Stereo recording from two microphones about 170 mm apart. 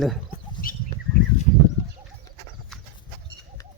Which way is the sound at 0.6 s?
55° left (ahead or behind).